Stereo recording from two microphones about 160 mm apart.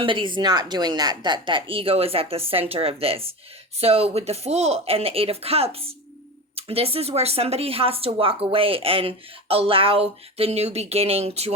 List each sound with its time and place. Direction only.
0.0 s speech: 30° right (ahead or behind)